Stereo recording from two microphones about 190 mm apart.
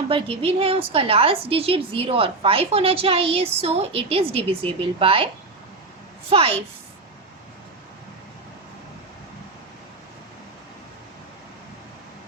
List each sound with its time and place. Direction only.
0.1 s a woman's voice: 30° right (ahead or behind)
6.3 s a woman's voice: 30° right (ahead or behind)